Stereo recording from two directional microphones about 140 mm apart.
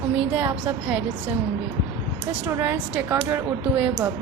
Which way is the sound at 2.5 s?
15° right (ahead or behind).